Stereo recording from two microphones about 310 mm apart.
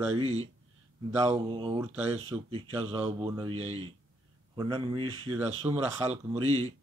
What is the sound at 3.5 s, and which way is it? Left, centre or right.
Speech, right.